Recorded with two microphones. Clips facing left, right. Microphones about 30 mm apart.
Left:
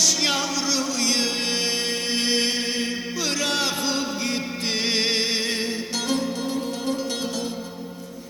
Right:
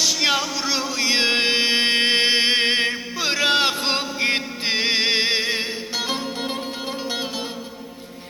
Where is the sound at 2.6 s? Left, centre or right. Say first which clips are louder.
Right 6 dB; right.